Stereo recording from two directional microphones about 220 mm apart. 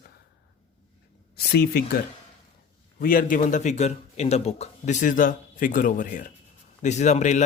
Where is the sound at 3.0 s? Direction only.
40° left (ahead or behind).